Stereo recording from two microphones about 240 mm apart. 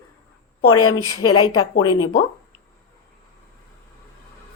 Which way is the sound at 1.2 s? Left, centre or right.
Centre.